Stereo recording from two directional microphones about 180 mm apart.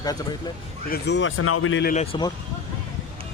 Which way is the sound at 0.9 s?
70° left (ahead or behind).